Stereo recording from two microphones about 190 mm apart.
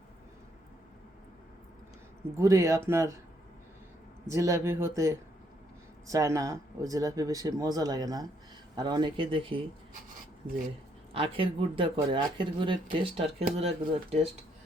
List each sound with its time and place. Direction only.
2.4 s speech: 15° right (ahead or behind)
4.3 s speech: 15° right (ahead or behind)
11.1 s speech: 30° right (ahead or behind)